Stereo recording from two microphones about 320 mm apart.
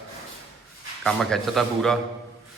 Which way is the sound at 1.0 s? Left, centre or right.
Centre.